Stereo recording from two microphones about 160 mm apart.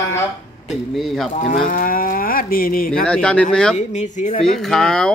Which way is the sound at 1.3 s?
55° left (ahead or behind).